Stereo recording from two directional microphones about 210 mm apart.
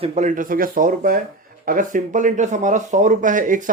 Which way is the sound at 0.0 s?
30° right (ahead or behind).